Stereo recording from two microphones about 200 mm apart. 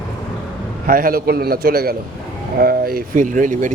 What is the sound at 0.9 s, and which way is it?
A man's voice, 45° right (ahead or behind).